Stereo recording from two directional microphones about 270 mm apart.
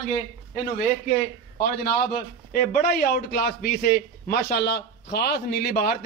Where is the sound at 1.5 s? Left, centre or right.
Left.